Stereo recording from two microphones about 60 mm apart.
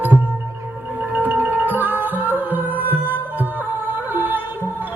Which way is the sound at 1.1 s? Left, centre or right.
Right.